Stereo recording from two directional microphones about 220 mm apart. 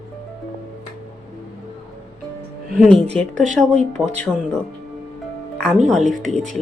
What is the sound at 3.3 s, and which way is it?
Speech, 35° right (ahead or behind).